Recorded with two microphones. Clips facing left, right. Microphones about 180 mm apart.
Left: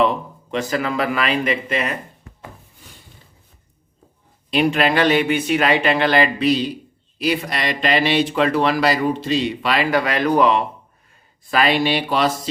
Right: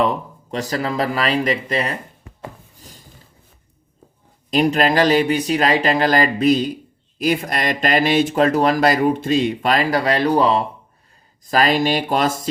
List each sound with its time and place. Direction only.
0.5 s speech: 35° right (ahead or behind)
4.5 s speech: 40° right (ahead or behind)